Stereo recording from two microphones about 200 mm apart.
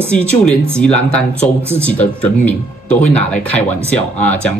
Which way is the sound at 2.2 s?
5° left (ahead or behind).